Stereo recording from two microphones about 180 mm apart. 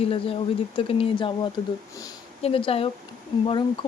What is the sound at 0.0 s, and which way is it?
Speech, 30° left (ahead or behind).